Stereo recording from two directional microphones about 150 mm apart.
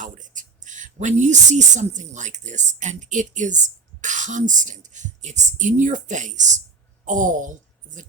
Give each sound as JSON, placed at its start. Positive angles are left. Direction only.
{"t": 0.0, "sound": "a woman's voice", "side_deg": -60}